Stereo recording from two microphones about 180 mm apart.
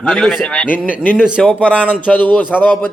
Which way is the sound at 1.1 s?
5° right (ahead or behind).